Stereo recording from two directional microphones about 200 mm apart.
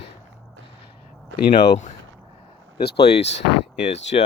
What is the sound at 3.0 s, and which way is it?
Speech, 30° left (ahead or behind).